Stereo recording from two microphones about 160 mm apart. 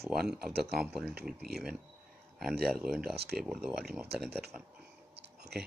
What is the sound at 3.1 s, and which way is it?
Speech, 85° right.